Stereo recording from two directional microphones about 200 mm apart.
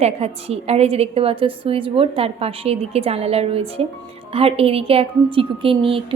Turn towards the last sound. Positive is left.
turn(degrees=-25)  # may be behind; listen again after turning